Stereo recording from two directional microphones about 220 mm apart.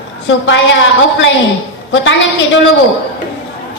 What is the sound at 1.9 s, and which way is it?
Speech, 60° left (ahead or behind).